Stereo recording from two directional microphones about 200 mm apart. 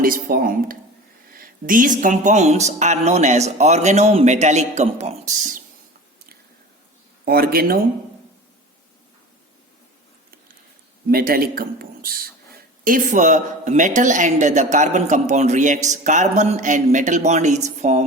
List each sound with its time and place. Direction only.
0.0 s a man's voice: 45° right (ahead or behind)
7.3 s a man's voice: 50° right (ahead or behind)
11.1 s a man's voice: 50° right (ahead or behind)